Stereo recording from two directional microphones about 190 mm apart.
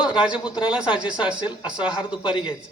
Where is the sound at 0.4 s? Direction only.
25° left (ahead or behind).